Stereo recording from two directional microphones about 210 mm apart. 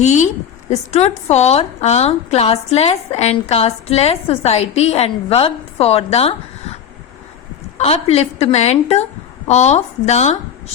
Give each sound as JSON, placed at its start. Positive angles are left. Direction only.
{"t": 0.0, "sound": "a woman's voice", "side_deg": 35}
{"t": 7.8, "sound": "a woman's voice", "side_deg": 30}